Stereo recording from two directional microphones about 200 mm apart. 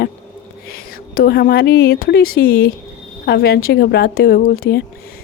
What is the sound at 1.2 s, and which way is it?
Speech, 50° left (ahead or behind).